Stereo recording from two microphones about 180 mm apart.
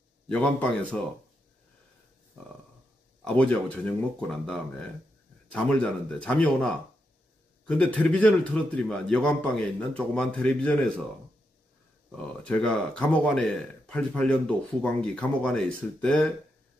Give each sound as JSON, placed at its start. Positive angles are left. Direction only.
{"t": 0.3, "sound": "speech", "side_deg": 5}
{"t": 3.3, "sound": "speech", "side_deg": 10}
{"t": 12.2, "sound": "speech", "side_deg": 5}